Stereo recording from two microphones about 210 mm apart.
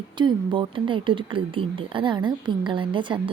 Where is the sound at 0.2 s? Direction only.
20° right (ahead or behind).